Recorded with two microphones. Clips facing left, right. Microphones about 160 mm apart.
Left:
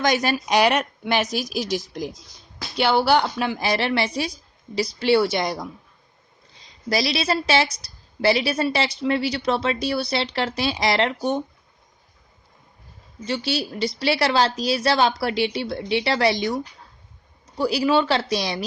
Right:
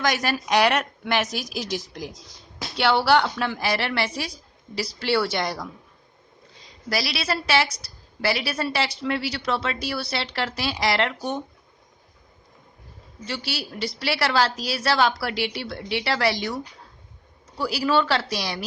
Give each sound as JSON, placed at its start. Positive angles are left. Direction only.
{"t": 0.0, "sound": "a woman's voice", "side_deg": 20}
{"t": 6.9, "sound": "a woman's voice", "side_deg": 20}
{"t": 13.2, "sound": "a woman's voice", "side_deg": 20}
{"t": 17.6, "sound": "a woman's voice", "side_deg": 20}